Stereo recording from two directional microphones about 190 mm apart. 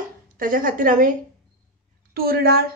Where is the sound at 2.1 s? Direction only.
50° right (ahead or behind).